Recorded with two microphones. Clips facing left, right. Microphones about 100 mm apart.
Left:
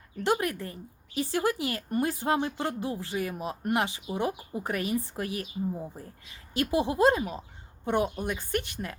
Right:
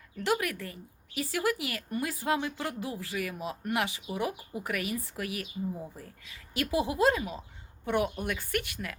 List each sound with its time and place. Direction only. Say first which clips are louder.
0.2 s speech: left 2 dB; 25° left (ahead or behind)